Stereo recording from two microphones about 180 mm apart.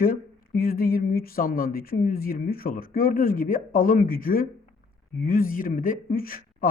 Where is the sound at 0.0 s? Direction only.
55° left (ahead or behind).